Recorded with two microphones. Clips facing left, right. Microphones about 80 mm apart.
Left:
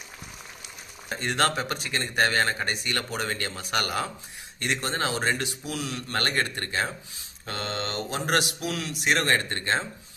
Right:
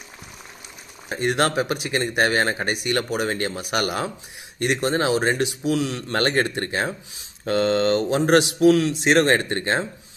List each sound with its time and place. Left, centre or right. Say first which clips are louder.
1.0 s speech: right 4 dB; centre
7.4 s speech: right 13 dB; right
8.1 s speech: right 9 dB; right